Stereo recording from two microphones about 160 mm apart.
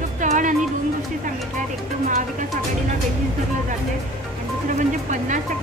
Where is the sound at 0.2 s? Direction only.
50° right (ahead or behind).